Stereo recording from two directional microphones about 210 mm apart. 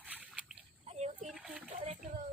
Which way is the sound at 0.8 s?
30° right (ahead or behind).